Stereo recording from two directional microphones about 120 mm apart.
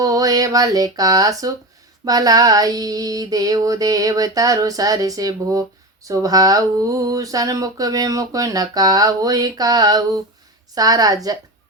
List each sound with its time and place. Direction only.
0.0 s female singing: 30° right (ahead or behind)